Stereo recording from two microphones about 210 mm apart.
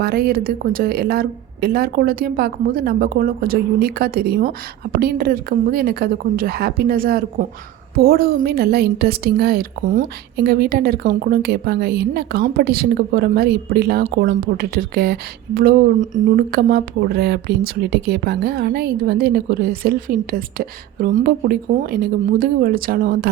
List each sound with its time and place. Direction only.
0.0 s a woman's voice: 45° right (ahead or behind)